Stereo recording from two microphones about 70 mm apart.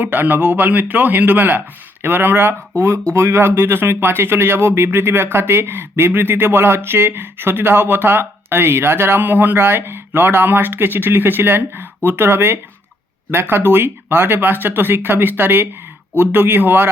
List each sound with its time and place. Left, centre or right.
0.0 s speech: right